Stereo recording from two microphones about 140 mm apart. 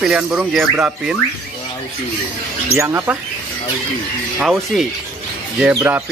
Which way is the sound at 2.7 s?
20° right (ahead or behind).